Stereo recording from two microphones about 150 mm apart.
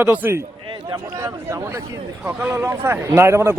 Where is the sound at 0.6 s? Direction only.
30° right (ahead or behind).